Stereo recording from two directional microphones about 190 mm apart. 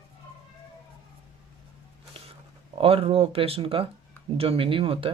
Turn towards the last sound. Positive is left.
turn(degrees=-30)  # may be behind; listen again after turning